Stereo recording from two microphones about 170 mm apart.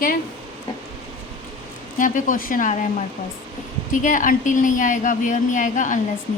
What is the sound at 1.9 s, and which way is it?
Speech, 50° left (ahead or behind).